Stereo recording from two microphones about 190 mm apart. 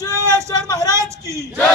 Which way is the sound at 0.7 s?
20° left (ahead or behind).